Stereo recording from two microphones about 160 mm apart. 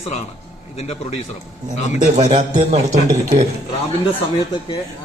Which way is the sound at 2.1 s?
45° right (ahead or behind).